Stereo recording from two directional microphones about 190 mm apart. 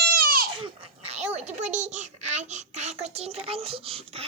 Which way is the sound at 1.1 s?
35° right (ahead or behind).